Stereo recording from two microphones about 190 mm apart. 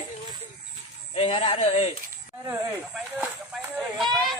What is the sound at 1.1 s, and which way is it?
Speech, 30° left (ahead or behind).